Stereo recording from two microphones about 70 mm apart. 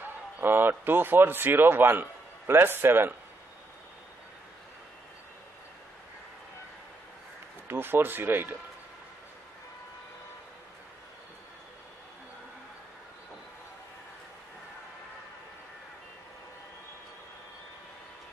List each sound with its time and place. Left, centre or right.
0.0 s speech: right
7.6 s speech: right